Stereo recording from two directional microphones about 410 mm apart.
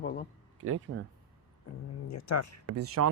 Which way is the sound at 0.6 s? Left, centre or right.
Right.